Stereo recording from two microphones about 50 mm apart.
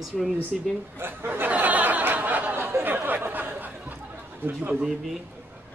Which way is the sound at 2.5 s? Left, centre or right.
Right.